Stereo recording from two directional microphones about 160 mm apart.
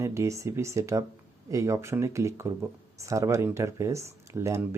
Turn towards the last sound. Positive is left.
turn(degrees=-15)  # may be behind; listen again after turning